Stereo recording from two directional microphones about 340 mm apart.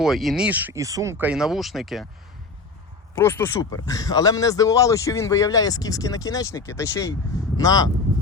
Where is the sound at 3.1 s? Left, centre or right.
Centre.